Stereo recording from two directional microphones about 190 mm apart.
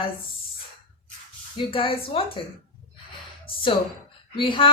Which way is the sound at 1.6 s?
30° left (ahead or behind).